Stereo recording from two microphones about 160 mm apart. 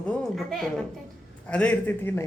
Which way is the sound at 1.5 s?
10° left (ahead or behind).